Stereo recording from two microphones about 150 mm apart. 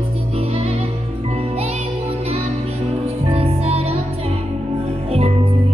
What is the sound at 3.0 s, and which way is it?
Music, 40° right (ahead or behind).